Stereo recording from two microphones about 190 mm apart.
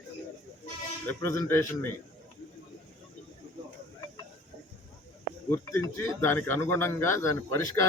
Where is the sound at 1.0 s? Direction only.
15° left (ahead or behind).